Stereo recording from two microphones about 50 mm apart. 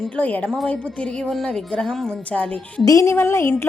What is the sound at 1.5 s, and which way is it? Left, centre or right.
Speech, centre.